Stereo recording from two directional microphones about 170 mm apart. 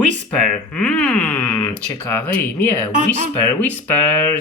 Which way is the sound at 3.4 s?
10° left (ahead or behind).